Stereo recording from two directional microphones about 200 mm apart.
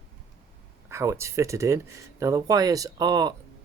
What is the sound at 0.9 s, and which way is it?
Speech, 15° right (ahead or behind).